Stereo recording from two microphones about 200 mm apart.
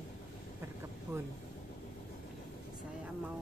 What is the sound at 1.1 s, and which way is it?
Speech, 10° right (ahead or behind).